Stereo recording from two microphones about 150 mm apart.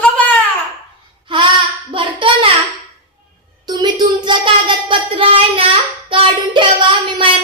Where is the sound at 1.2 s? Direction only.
35° right (ahead or behind).